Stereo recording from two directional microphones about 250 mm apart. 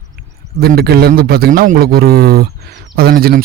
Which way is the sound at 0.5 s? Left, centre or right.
Right.